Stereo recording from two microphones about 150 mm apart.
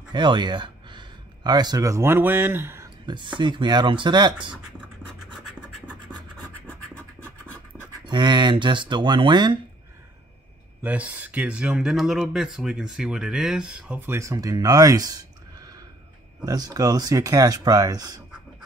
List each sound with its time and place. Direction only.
0.1 s speech: 30° right (ahead or behind)
3.1 s speech: 30° right (ahead or behind)
8.0 s speech: 30° right (ahead or behind)
10.8 s speech: 10° right (ahead or behind)
16.4 s speech: 25° right (ahead or behind)